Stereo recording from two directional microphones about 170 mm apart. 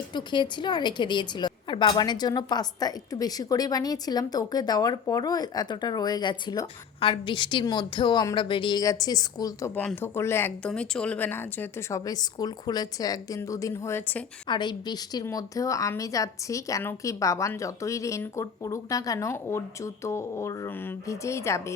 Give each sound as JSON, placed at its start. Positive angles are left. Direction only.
{"t": 0.1, "sound": "a woman's voice", "side_deg": 25}
{"t": 14.4, "sound": "a woman's voice", "side_deg": 25}